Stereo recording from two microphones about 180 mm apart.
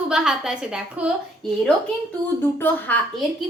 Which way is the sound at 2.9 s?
10° left (ahead or behind).